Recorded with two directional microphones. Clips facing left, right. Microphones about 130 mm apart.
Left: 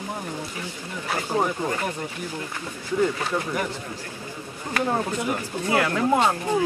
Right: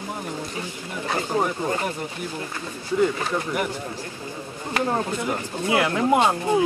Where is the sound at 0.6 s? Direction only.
25° right (ahead or behind).